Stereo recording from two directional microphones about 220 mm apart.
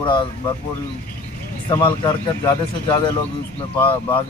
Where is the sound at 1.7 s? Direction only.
20° left (ahead or behind).